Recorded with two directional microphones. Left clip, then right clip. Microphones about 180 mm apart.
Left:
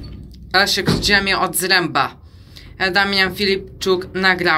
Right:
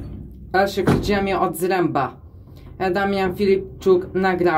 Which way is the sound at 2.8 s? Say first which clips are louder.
Left 4 dB; 10° right (ahead or behind).